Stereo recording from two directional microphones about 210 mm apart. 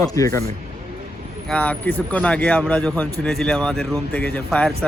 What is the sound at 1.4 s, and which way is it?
Speech, 5° left (ahead or behind).